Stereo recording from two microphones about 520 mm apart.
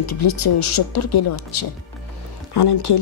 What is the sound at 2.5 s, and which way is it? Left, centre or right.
Speech, left.